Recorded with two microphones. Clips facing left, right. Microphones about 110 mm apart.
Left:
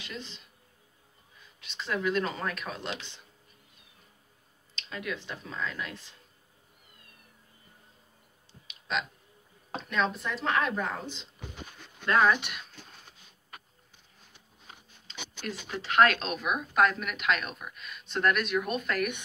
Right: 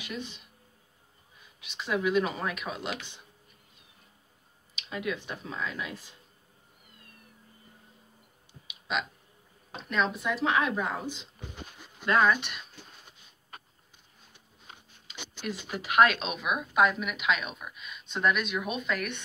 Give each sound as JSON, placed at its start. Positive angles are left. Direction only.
{"t": 0.0, "sound": "speech", "side_deg": -10}
{"t": 1.6, "sound": "speech", "side_deg": -5}
{"t": 4.7, "sound": "speech", "side_deg": -15}
{"t": 8.6, "sound": "a sound", "side_deg": -5}
{"t": 9.8, "sound": "speech", "side_deg": 0}
{"t": 11.8, "sound": "a sound", "side_deg": -10}
{"t": 15.0, "sound": "speech", "side_deg": -10}